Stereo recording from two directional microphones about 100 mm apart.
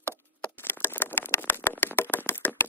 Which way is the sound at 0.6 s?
20° left (ahead or behind).